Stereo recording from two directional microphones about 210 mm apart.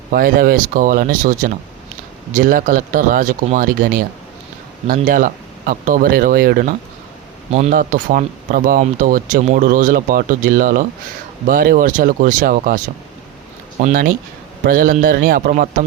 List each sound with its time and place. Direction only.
0.1 s speech: 45° right (ahead or behind)
13.8 s speech: 40° right (ahead or behind)